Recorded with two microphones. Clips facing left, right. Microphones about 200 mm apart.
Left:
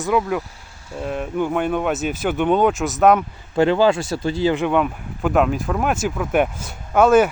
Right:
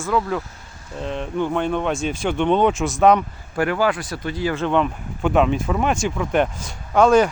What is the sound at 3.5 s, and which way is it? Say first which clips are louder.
Speech: left 5 dB; 25° left (ahead or behind).